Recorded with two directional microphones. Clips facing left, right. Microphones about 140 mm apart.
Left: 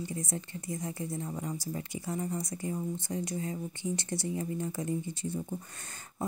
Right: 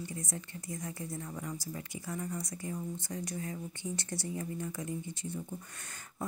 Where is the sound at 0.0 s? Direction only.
25° left (ahead or behind).